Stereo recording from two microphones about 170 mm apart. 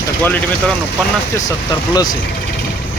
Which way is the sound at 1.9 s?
25° left (ahead or behind).